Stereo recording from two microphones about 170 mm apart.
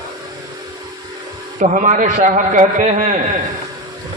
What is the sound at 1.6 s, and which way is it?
A man's voice, 45° right (ahead or behind).